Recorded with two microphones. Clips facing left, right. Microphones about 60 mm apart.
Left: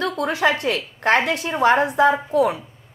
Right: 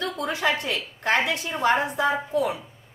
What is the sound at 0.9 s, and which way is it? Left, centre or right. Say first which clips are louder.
A woman's voice: left 4 dB; left.